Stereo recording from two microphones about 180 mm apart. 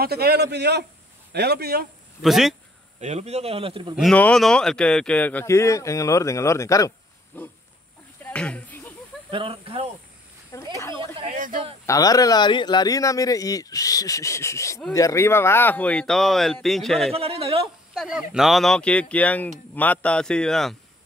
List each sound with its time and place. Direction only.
0.0 s a man's voice: 60° right (ahead or behind)
2.2 s speech: centre (ahead or behind)
3.0 s speech: 40° right (ahead or behind)
3.9 s speech: 5° left (ahead or behind)
8.2 s a sound: 5° left (ahead or behind)
9.3 s speech: 30° right (ahead or behind)
10.8 s snake: 15° left (ahead or behind)
11.3 s a sound: 50° right (ahead or behind)
11.8 s speech: 20° left (ahead or behind); by 17.1 s centre (ahead or behind)
17.1 s speech: 35° right (ahead or behind)
17.9 s speech: 5° right (ahead or behind)